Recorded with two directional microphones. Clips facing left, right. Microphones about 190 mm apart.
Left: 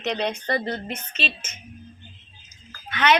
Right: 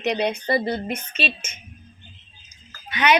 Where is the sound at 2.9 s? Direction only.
15° right (ahead or behind).